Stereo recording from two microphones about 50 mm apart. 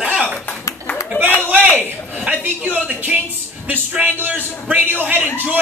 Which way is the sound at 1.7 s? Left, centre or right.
Right.